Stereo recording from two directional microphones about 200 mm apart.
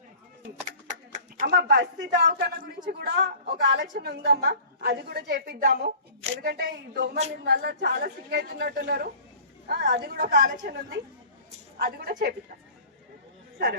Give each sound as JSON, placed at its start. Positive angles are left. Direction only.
{"t": 1.1, "sound": "speech", "side_deg": -40}